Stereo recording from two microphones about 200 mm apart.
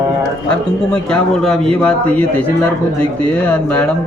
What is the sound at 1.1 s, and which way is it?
A man's voice, 5° left (ahead or behind).